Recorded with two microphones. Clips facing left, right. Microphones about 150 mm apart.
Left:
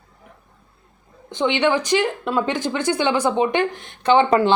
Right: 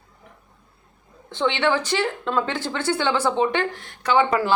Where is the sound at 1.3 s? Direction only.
15° left (ahead or behind).